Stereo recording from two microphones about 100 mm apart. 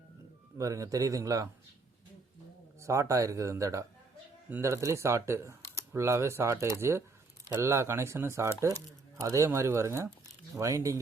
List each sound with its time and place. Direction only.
0.6 s speech: 35° right (ahead or behind)
2.8 s speech: 30° right (ahead or behind)